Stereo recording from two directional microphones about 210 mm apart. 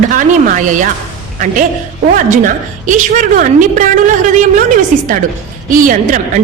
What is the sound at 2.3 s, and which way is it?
A woman's voice, 40° right (ahead or behind).